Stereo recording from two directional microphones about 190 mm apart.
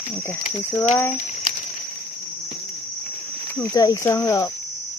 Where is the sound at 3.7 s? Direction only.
20° left (ahead or behind).